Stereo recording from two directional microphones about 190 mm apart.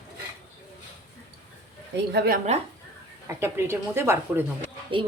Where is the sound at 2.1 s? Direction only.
55° right (ahead or behind).